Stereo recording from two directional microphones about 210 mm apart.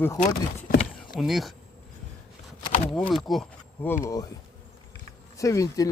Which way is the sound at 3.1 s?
Centre (ahead or behind).